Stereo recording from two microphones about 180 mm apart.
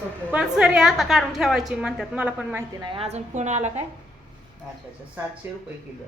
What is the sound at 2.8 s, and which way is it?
A woman's voice, 30° right (ahead or behind).